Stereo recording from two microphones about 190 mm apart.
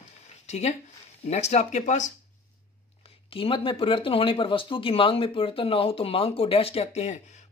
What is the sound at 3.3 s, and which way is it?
Speech, 30° left (ahead or behind).